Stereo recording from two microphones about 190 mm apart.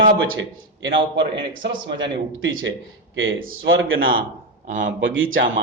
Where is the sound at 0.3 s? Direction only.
75° right (ahead or behind).